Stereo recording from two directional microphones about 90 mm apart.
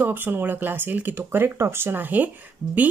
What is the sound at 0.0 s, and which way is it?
Speech, 20° right (ahead or behind).